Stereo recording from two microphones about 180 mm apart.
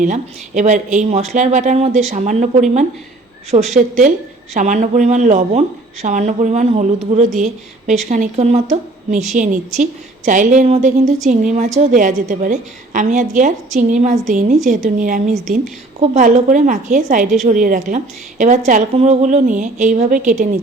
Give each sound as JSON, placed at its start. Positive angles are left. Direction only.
{"t": 0.0, "sound": "a woman's voice", "side_deg": -40}